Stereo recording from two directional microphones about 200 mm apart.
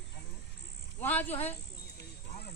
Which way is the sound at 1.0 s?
10° left (ahead or behind).